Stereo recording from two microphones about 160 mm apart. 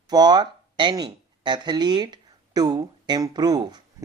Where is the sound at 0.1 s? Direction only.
25° right (ahead or behind).